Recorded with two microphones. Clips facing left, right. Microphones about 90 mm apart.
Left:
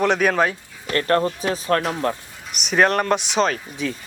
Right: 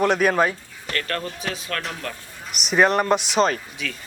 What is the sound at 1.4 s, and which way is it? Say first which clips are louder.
Speech: left 8 dB; 35° left (ahead or behind).